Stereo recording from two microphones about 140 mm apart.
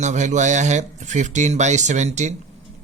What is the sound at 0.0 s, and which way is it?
Speech, 60° right (ahead or behind).